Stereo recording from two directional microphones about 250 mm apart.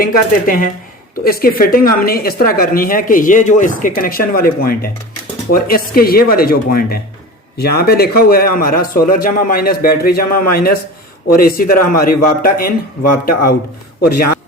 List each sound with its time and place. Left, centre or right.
0.0 s a woman's voice: left